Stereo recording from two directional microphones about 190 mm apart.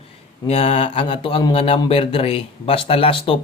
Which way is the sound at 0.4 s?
30° left (ahead or behind).